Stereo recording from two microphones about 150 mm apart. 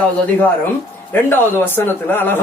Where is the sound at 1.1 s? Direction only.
15° left (ahead or behind).